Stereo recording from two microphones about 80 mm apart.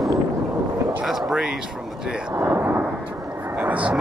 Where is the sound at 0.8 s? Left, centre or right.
Centre.